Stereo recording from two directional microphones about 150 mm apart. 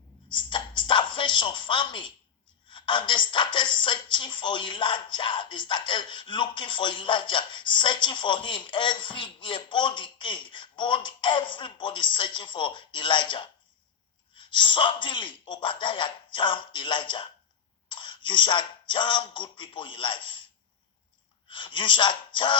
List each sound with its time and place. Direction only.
0.8 s a woman's voice: 30° left (ahead or behind)
17.8 s a sound: 35° left (ahead or behind)
21.5 s a woman's voice: 35° left (ahead or behind)